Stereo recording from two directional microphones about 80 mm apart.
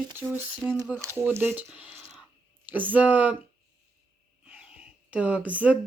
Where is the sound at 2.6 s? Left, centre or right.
Right.